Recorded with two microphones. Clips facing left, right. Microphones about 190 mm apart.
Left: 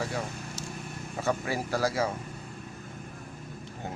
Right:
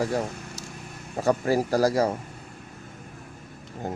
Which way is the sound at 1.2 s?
40° right (ahead or behind).